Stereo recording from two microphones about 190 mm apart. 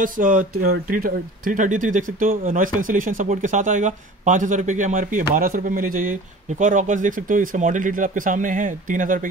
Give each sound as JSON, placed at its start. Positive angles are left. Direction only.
{"t": 0.0, "sound": "speech", "side_deg": -45}